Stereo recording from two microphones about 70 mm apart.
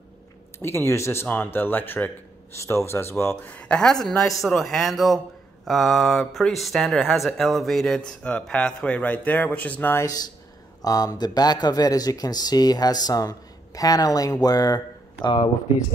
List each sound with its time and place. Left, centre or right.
0.6 s speech: left
1.2 s speech: left
2.6 s speech: left
3.4 s speech: centre
10.0 s speech: left